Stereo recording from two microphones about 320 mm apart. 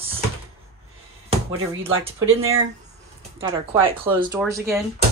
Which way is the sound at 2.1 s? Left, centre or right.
Right.